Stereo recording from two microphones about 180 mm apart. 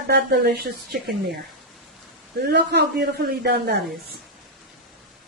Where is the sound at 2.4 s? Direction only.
65° right (ahead or behind).